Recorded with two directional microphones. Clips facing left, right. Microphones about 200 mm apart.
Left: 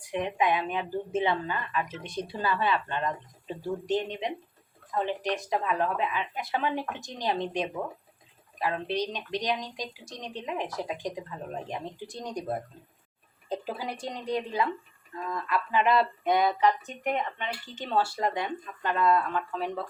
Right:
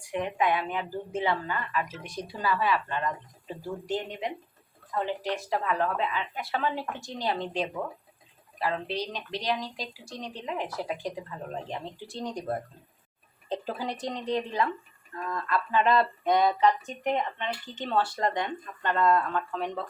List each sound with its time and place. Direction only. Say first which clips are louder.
0.0 s a woman's voice: even; 20° left (ahead or behind); by 19.9 s 5° left (ahead or behind)